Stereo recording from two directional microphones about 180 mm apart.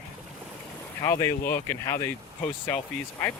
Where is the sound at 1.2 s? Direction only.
15° left (ahead or behind).